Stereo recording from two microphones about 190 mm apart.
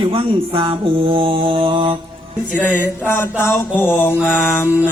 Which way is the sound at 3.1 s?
10° left (ahead or behind).